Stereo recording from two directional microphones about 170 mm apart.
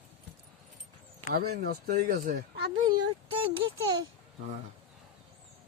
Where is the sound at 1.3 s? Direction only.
65° right (ahead or behind).